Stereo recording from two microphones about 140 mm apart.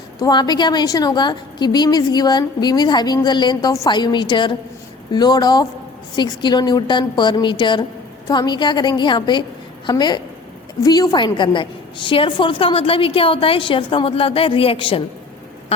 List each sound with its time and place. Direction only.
0.2 s a woman's voice: 30° left (ahead or behind)